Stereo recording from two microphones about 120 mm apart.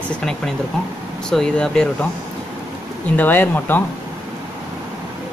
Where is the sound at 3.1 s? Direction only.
15° left (ahead or behind).